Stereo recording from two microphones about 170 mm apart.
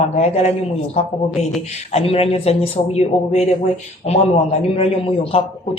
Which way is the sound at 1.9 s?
35° left (ahead or behind).